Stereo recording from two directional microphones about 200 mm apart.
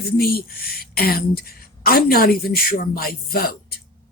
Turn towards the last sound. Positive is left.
turn(degrees=50)  # may be behind; listen again after turning